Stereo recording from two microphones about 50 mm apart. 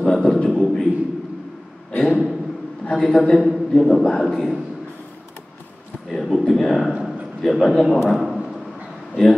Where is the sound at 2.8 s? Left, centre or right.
Centre.